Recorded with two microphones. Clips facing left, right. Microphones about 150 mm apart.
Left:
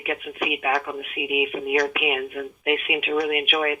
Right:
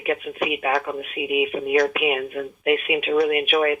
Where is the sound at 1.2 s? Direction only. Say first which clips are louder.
Right 2 dB; 15° left (ahead or behind).